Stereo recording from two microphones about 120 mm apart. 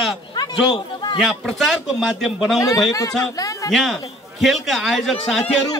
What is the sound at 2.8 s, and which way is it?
Speech, 30° left (ahead or behind).